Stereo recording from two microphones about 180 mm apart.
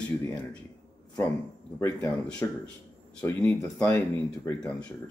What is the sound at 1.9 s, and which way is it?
Speech, 5° left (ahead or behind).